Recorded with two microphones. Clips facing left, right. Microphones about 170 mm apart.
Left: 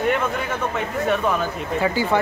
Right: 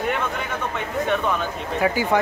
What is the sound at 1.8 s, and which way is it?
Speech, 15° right (ahead or behind).